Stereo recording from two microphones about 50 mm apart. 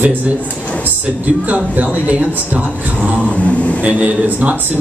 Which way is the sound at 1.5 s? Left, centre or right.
Right.